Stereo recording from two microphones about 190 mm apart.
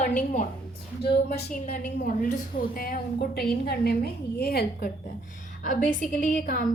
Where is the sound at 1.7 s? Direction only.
40° left (ahead or behind).